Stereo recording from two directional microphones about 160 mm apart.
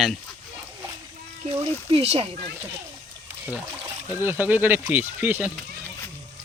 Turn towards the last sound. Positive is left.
turn(degrees=-10)  # may be behind; listen again after turning